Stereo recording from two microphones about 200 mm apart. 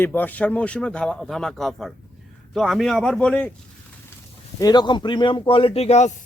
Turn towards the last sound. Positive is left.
turn(degrees=35)  # may be behind; listen again after turning